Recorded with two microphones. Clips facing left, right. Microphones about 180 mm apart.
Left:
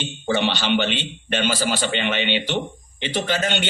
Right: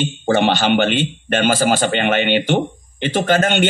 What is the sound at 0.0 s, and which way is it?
A man's voice, 50° right (ahead or behind).